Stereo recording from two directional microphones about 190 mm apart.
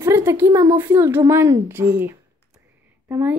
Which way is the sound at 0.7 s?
10° right (ahead or behind).